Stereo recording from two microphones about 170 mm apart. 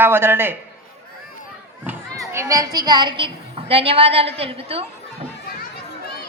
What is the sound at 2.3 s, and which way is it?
A woman's voice, 20° right (ahead or behind).